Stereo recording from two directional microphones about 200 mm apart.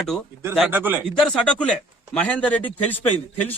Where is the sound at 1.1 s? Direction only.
5° left (ahead or behind).